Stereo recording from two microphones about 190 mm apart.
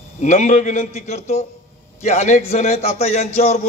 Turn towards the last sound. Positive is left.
turn(degrees=35)  # may be behind; listen again after turning